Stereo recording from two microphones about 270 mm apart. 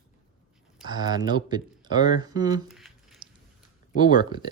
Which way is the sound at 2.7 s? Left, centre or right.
Centre.